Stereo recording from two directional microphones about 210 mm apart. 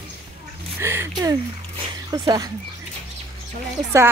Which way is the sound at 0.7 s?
10° right (ahead or behind).